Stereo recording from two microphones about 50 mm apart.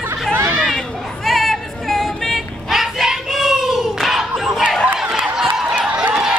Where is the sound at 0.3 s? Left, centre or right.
Right.